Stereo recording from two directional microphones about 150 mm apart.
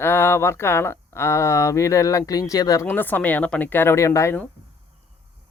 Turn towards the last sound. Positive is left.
turn(degrees=20)  # may be behind; listen again after turning